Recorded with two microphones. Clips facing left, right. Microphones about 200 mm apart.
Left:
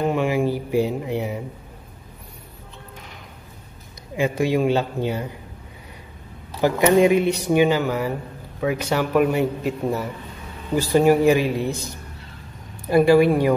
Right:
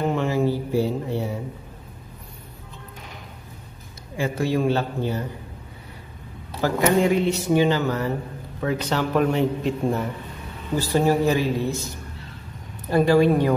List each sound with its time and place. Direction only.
0.1 s a sound: 15° left (ahead or behind)
4.2 s speech: 15° left (ahead or behind)
6.6 s speech: 15° left (ahead or behind)